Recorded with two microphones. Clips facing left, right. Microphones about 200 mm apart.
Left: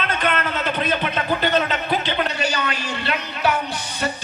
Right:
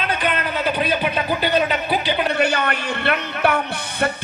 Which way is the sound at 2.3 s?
55° right (ahead or behind).